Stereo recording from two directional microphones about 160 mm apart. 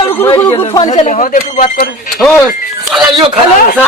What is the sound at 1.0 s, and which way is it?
A man's voice, 50° left (ahead or behind).